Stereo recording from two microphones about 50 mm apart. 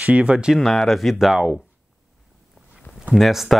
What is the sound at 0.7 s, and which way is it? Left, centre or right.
Speech, centre.